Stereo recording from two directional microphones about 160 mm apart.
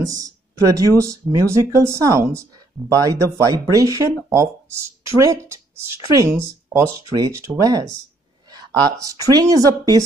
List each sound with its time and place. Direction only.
0.0 s speech: 20° right (ahead or behind)